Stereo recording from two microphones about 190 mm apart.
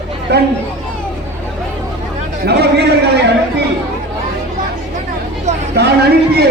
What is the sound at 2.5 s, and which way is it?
Speech, 60° right (ahead or behind).